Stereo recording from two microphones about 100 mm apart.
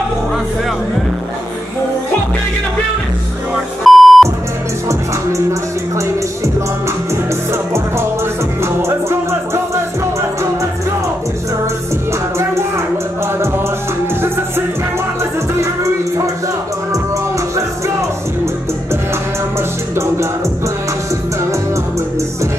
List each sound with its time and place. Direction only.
3.8 s beep: centre (ahead or behind)
4.8 s music: 30° right (ahead or behind)
7.5 s music: 25° right (ahead or behind)
12.1 s music: 25° right (ahead or behind)
15.6 s music: 30° right (ahead or behind)